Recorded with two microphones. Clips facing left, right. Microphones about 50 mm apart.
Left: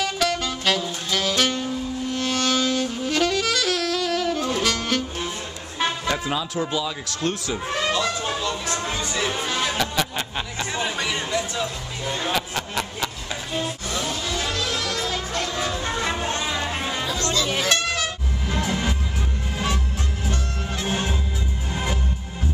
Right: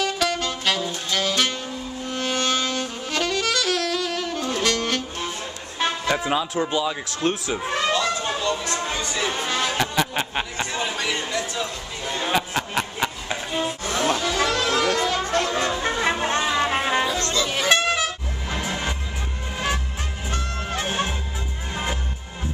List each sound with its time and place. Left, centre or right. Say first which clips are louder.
0.0 s music: even; centre
6.5 s speech: right 2 dB; centre
9.8 s music: right 2 dB; right
10.7 s speech: left 3 dB; centre
12.3 s music: right 5 dB; centre
14.3 s music: right 5 dB; right
16.0 s music: right 4 dB; right
16.3 s music: right 4 dB; right
17.3 s music: even; centre
17.6 s a sound: right 3 dB; centre
18.5 s music: left 2 dB; centre
20.8 s music: even; right